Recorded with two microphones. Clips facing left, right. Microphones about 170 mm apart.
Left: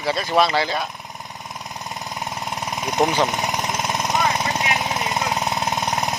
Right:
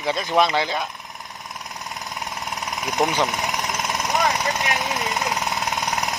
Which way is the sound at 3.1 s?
15° left (ahead or behind).